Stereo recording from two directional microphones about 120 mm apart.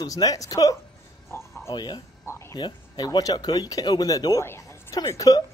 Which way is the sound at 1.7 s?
35° left (ahead or behind).